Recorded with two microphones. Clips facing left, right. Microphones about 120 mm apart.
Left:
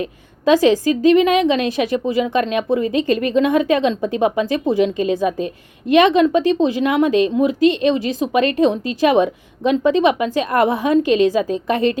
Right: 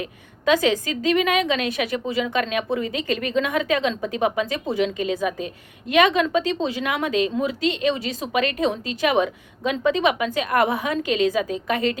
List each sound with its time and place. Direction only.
0.0 s a woman's voice: 25° left (ahead or behind)